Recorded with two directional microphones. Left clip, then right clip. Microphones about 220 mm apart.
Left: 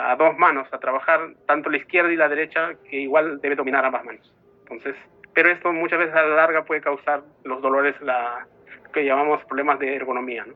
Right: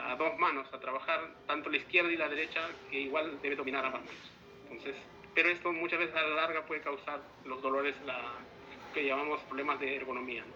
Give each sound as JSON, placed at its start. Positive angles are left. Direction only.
{"t": 0.0, "sound": "a man's voice", "side_deg": 30}